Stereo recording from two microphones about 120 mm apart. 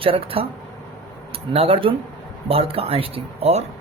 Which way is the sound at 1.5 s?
50° right (ahead or behind).